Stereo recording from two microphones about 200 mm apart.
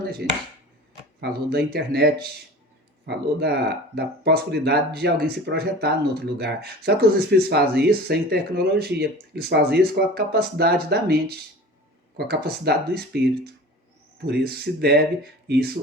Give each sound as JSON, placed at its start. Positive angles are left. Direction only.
{"t": 0.2, "sound": "speech", "side_deg": -55}